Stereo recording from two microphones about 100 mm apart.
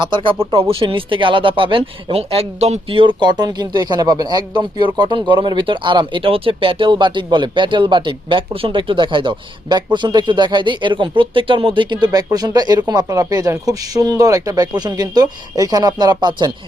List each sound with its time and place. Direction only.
0.0 s speech: 55° right (ahead or behind)